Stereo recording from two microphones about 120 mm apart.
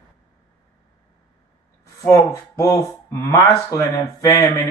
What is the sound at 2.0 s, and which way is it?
Speech, 25° left (ahead or behind).